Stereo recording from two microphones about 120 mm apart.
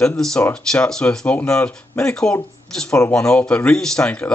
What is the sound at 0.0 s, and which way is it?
Speech, 5° left (ahead or behind).